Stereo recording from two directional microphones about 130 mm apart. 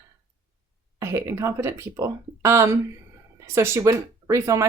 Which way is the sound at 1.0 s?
20° right (ahead or behind).